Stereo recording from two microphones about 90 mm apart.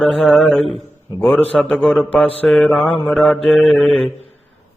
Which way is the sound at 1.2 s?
20° left (ahead or behind).